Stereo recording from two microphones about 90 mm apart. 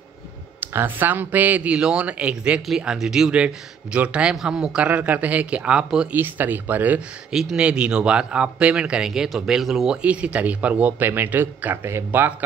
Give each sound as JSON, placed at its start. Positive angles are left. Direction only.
{"t": 0.6, "sound": "speech", "side_deg": -20}
{"t": 6.1, "sound": "speech", "side_deg": -20}
{"t": 7.3, "sound": "speech", "side_deg": -10}
{"t": 10.0, "sound": "speech", "side_deg": -15}